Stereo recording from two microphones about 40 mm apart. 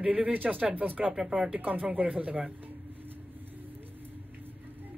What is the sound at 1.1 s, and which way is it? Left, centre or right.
Speech, centre.